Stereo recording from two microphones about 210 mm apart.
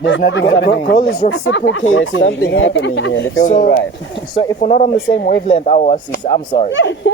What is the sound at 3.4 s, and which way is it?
Speech, 45° left (ahead or behind).